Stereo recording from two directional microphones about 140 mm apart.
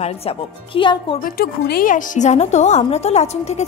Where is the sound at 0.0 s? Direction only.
45° left (ahead or behind).